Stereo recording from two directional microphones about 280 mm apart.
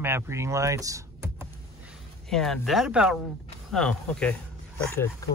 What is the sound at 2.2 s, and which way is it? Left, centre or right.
Speech, centre.